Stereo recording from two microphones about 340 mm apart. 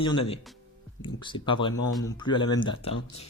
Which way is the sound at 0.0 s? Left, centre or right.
Centre.